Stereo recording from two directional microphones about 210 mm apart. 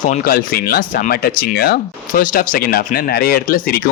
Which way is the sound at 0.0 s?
40° left (ahead or behind).